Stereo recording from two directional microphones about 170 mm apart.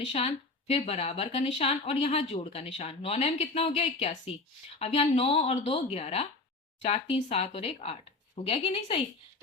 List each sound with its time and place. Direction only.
0.1 s speech: 40° left (ahead or behind)